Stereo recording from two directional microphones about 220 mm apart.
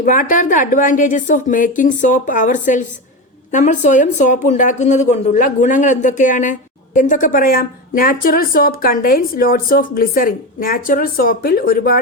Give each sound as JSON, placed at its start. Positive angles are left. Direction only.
{"t": 0.0, "sound": "speech", "side_deg": 35}